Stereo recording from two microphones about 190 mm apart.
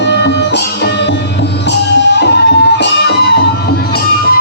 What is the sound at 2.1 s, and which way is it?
Music, 60° left (ahead or behind).